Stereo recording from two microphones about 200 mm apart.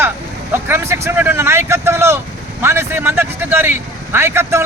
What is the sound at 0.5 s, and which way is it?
Speech, 10° right (ahead or behind).